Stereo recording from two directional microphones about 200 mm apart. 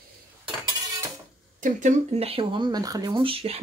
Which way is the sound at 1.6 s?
35° right (ahead or behind).